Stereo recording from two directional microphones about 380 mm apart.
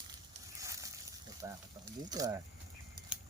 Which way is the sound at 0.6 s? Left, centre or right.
Centre.